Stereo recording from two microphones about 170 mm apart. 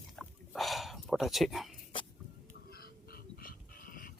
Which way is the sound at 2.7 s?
60° left (ahead or behind).